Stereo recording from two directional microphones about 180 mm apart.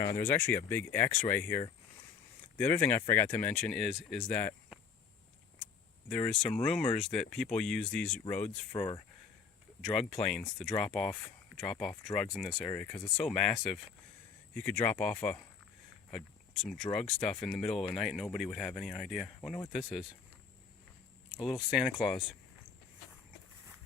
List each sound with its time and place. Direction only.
0.2 s speech: 10° left (ahead or behind)
4.3 s speech: 10° left (ahead or behind)
6.1 s speech: 5° left (ahead or behind)
8.7 s speech: 25° left (ahead or behind)
9.9 s speech: centre (ahead or behind)
21.4 s speech: centre (ahead or behind)